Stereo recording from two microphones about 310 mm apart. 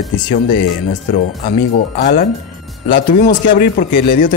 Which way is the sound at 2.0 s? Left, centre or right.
Left.